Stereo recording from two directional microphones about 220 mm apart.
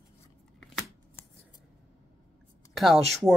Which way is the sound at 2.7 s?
Centre (ahead or behind).